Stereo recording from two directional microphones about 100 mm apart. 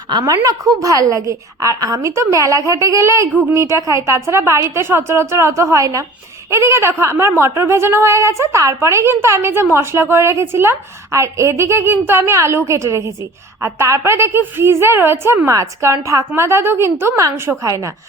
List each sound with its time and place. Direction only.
0.1 s a woman's voice: 40° right (ahead or behind)